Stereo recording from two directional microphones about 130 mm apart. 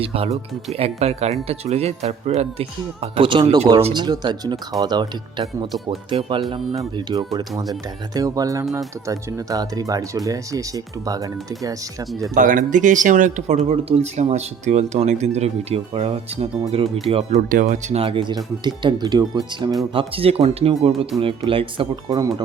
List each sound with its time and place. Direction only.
0.0 s speech: 50° right (ahead or behind)
6.1 s speech: 45° right (ahead or behind)
6.7 s speech: 30° right (ahead or behind)
12.3 s speech: 80° right; by 17.4 s 50° right (ahead or behind)
17.5 s speech: 80° right
18.0 s speech: 40° right (ahead or behind)
19.9 s speech: 45° right (ahead or behind)